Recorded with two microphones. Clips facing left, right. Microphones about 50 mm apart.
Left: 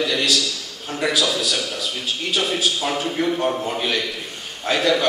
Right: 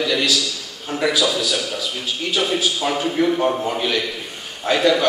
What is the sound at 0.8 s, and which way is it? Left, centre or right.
A man's voice, centre.